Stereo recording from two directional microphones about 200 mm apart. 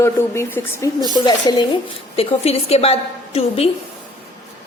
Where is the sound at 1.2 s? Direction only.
25° left (ahead or behind).